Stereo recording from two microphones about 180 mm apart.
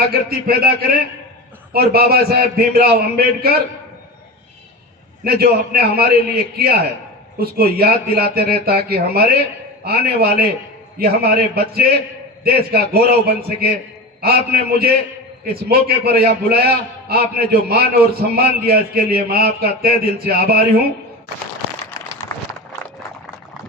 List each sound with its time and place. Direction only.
0.3 s a man's voice: 60° right (ahead or behind)
5.2 s a man's voice: 55° right (ahead or behind)
16.0 s a man's voice: 60° right (ahead or behind)